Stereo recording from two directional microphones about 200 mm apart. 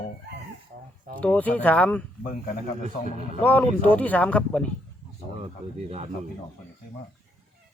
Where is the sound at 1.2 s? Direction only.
5° left (ahead or behind).